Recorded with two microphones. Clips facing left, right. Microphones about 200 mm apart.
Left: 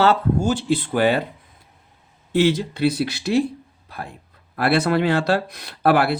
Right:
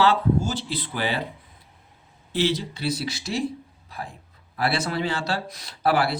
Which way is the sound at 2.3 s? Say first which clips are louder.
Left 6 dB; 50° left (ahead or behind).